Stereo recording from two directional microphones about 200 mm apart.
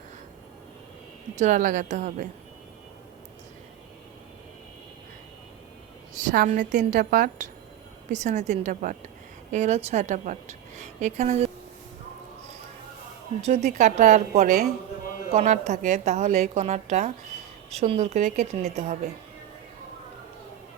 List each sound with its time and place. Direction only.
1.4 s a woman's voice: 40° right (ahead or behind)
6.2 s a woman's voice: 45° right (ahead or behind)
13.4 s a woman's voice: 35° right (ahead or behind)